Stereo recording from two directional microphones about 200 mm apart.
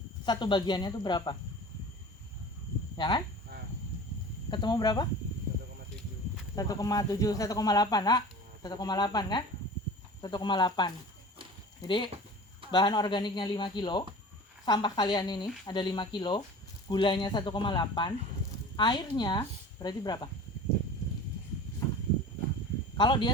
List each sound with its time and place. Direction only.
0.3 s speech: 25° left (ahead or behind)
3.0 s speech: 20° left (ahead or behind)
4.5 s speech: 20° left (ahead or behind)
6.6 s speech: 15° left (ahead or behind)
23.0 s speech: 25° left (ahead or behind)